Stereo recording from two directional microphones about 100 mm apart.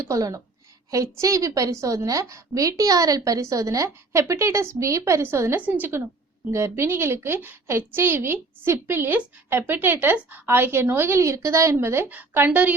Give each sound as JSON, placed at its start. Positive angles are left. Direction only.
{"t": 0.0, "sound": "a woman's voice", "side_deg": -35}